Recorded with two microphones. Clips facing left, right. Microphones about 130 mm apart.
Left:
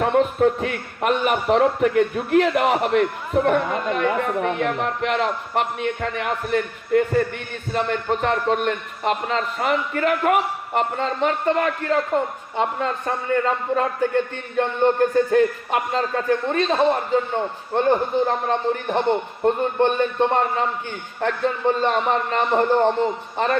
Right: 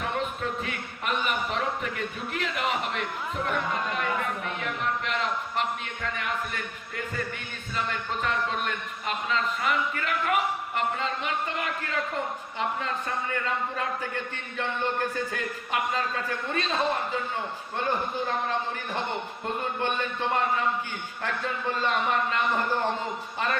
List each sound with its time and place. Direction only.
0.0 s a man's voice: 55° left (ahead or behind)
12.5 s a man's voice: 35° left (ahead or behind)